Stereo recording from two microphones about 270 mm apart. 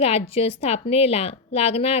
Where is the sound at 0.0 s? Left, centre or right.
Left.